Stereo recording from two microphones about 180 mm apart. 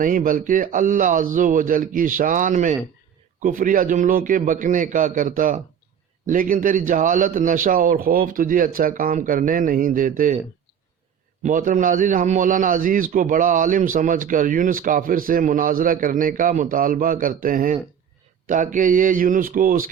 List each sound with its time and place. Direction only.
0.0 s a man's voice: 50° right (ahead or behind)
11.4 s a man's voice: 45° right (ahead or behind)